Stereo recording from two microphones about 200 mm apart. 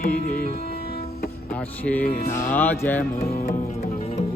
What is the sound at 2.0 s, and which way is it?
Music, 50° left (ahead or behind).